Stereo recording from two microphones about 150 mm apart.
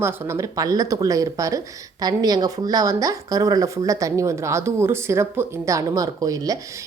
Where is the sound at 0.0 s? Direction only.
15° right (ahead or behind).